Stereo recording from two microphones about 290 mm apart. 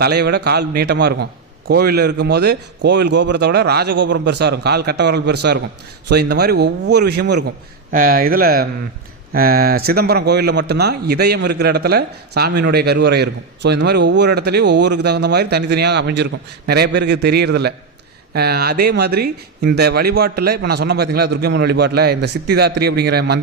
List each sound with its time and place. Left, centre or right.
0.0 s a man's voice: right